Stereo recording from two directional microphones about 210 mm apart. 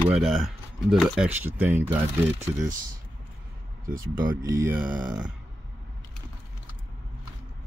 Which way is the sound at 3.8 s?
40° right (ahead or behind).